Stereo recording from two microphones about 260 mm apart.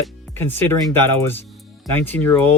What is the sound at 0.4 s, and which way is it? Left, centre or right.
Speech, centre.